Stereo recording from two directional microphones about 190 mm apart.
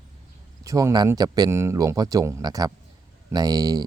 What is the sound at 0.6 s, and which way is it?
Speech, 15° right (ahead or behind).